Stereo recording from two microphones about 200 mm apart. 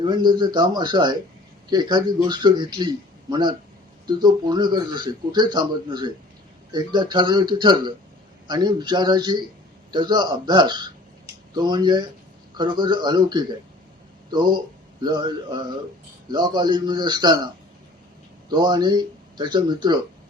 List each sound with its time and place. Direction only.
0.0 s speech: 20° right (ahead or behind)